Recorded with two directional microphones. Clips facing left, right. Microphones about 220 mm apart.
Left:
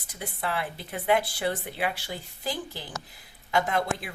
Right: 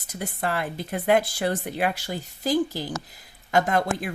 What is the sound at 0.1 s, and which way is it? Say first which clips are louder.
Speech: right 4 dB; 45° right (ahead or behind).